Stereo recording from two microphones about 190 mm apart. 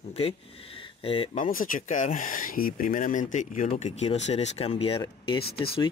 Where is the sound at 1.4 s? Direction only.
45° left (ahead or behind).